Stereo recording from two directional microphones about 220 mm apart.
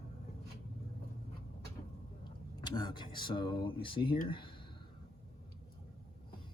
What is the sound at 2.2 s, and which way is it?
Speech, 20° left (ahead or behind).